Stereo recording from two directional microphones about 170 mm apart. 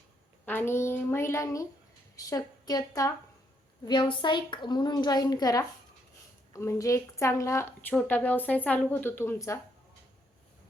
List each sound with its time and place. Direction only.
0.4 s a woman's voice: 15° left (ahead or behind)